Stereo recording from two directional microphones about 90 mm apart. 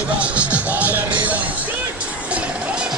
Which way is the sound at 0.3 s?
15° right (ahead or behind).